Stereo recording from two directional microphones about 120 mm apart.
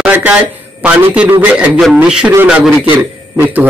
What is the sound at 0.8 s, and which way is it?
A man's voice, 15° right (ahead or behind).